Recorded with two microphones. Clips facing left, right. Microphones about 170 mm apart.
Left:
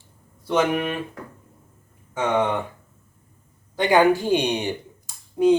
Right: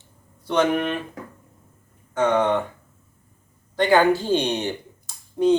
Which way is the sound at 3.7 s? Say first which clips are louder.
Even; 15° left (ahead or behind).